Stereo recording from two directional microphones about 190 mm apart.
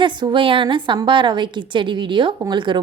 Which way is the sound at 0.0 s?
25° right (ahead or behind).